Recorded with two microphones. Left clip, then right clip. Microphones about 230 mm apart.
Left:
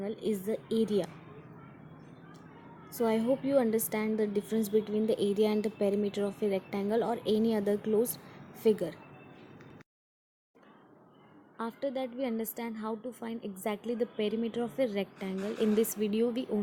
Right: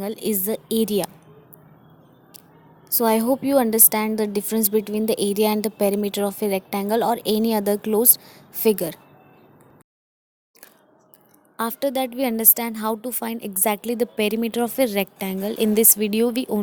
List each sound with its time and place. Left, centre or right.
0.0 s a woman's voice: right
2.9 s a woman's voice: right
11.5 s a woman's voice: right